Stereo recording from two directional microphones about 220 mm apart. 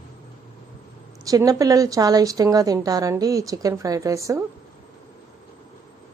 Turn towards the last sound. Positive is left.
turn(degrees=-15)  # may be behind; listen again after turning